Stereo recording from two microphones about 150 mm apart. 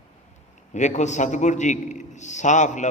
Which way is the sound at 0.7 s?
55° left (ahead or behind).